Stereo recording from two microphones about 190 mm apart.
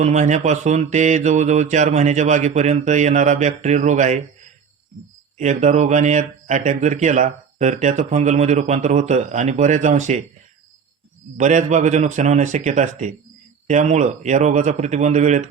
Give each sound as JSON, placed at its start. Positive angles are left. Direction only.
{"t": 0.0, "sound": "speech", "side_deg": -40}
{"t": 5.4, "sound": "speech", "side_deg": -40}
{"t": 11.3, "sound": "speech", "side_deg": -40}